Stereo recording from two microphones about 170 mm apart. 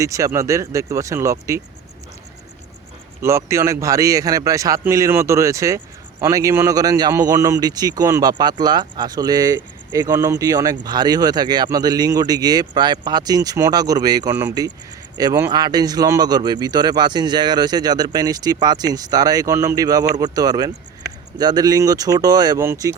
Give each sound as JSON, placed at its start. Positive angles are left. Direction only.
{"t": 0.0, "sound": "speech", "side_deg": -20}
{"t": 3.2, "sound": "speech", "side_deg": -15}